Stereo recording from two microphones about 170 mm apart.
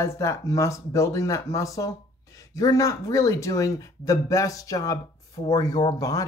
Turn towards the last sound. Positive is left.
turn(degrees=20)  # may be behind; listen again after turning